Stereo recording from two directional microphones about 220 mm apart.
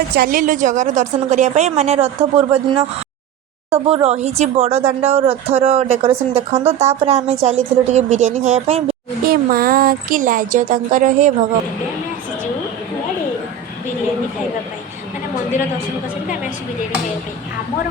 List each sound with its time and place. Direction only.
0.1 s a woman's voice: 40° right (ahead or behind)
9.2 s a woman's voice: 40° right (ahead or behind)